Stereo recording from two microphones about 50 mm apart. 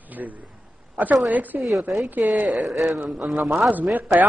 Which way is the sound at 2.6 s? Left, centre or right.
Centre.